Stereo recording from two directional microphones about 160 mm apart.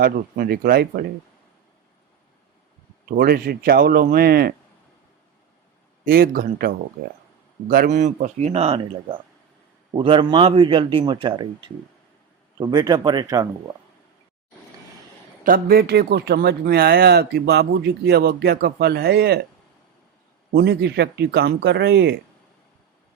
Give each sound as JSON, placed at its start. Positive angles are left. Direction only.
{"t": 0.0, "sound": "speech", "side_deg": -70}
{"t": 3.1, "sound": "speech", "side_deg": -65}
{"t": 6.1, "sound": "speech", "side_deg": -65}
{"t": 7.0, "sound": "speech", "side_deg": -75}
{"t": 7.7, "sound": "a man's voice", "side_deg": -55}
{"t": 12.5, "sound": "speech", "side_deg": -25}
{"t": 15.4, "sound": "speech", "side_deg": -70}
{"t": 20.5, "sound": "speech", "side_deg": -85}